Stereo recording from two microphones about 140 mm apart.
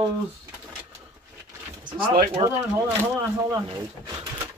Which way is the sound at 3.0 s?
20° right (ahead or behind).